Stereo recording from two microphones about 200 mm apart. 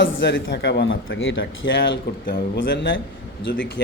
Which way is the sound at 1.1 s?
70° left (ahead or behind).